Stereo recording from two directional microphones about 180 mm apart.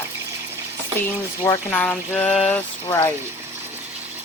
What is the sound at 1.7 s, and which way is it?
Speech, 10° left (ahead or behind).